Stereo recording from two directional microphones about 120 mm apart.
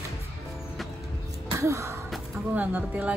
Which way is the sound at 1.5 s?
25° right (ahead or behind).